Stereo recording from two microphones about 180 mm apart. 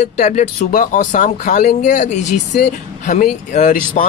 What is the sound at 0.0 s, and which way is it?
Speech, 40° left (ahead or behind).